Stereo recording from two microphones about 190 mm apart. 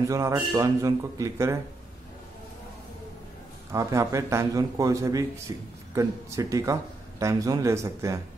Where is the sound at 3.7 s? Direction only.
15° right (ahead or behind).